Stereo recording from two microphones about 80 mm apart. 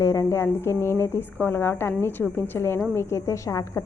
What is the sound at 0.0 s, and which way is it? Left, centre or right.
A woman's voice, left.